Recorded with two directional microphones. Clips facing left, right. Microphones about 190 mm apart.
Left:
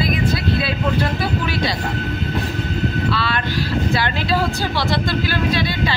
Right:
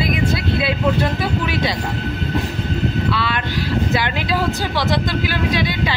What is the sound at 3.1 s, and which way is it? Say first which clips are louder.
A woman's voice: even; 20° right (ahead or behind).